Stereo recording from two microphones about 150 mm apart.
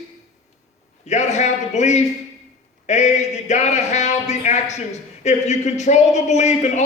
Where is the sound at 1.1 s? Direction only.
50° left (ahead or behind).